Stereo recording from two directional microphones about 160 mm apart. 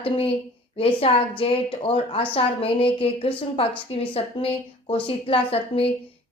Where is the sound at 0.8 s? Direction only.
35° left (ahead or behind).